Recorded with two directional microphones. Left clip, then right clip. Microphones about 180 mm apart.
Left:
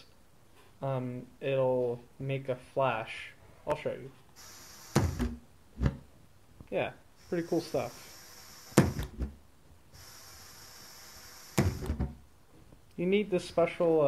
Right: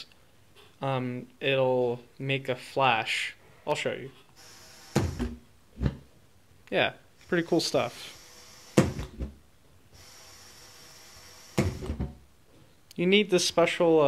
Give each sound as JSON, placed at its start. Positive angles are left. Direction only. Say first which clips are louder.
{"t": 0.7, "sound": "speech", "louder": "right 5 dB", "side_deg": -25}
{"t": 4.9, "sound": "thunk", "louder": "right 2 dB", "side_deg": 5}
{"t": 6.7, "sound": "speech", "louder": "right 7 dB", "side_deg": -25}
{"t": 8.7, "sound": "a sound", "louder": "right 2 dB", "side_deg": 10}
{"t": 11.5, "sound": "music", "louder": "right 2 dB", "side_deg": 10}
{"t": 12.8, "sound": "speech", "louder": "right 6 dB", "side_deg": -25}